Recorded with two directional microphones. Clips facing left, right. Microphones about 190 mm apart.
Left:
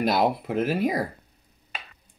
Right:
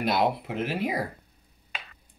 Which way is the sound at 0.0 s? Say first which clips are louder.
Left 2 dB; 40° left (ahead or behind).